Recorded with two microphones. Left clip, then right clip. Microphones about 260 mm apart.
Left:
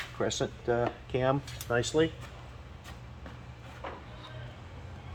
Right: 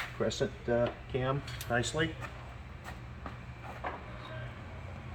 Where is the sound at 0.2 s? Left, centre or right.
Centre.